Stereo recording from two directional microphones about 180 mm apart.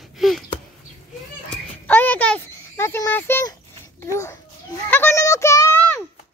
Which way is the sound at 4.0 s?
15° left (ahead or behind).